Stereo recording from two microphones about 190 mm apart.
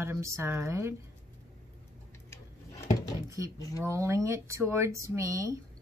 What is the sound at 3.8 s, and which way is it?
Speech, 15° right (ahead or behind).